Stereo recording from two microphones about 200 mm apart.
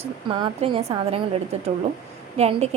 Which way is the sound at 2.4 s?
30° right (ahead or behind).